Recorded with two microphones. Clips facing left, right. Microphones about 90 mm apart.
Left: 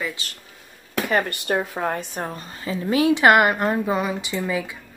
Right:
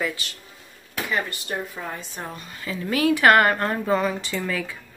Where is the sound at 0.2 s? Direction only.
30° left (ahead or behind).